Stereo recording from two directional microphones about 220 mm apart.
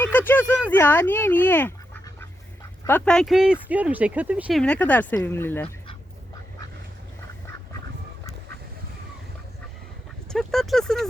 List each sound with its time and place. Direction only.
0.2 s speech: 10° left (ahead or behind)
2.8 s speech: 5° left (ahead or behind)
4.6 s speech: 5° left (ahead or behind)
10.2 s speech: centre (ahead or behind)